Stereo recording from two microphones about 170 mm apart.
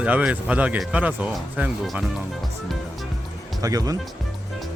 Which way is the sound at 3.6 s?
20° right (ahead or behind).